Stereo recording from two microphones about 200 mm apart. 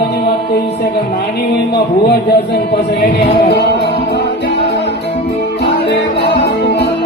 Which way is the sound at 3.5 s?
55° left (ahead or behind).